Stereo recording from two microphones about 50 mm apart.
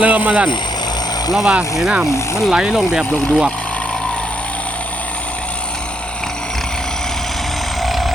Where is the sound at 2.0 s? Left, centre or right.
Left.